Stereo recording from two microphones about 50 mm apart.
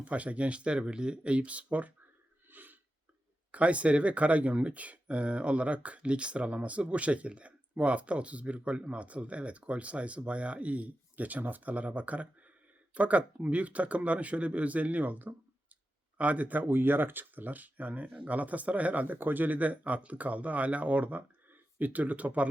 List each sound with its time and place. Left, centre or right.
0.0 s speech: right
2.5 s a sound: right
3.5 s speech: right